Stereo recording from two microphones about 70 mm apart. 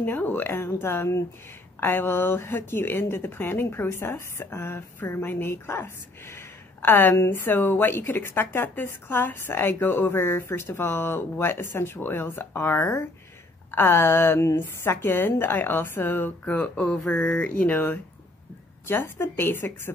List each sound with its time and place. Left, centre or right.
0.0 s speech: left